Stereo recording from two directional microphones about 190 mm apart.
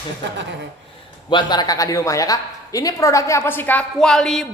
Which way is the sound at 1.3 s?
20° left (ahead or behind).